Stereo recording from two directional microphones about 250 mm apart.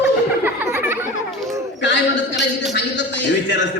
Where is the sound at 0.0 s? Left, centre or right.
Centre.